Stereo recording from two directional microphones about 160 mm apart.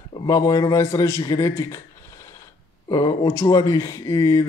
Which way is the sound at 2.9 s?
25° left (ahead or behind).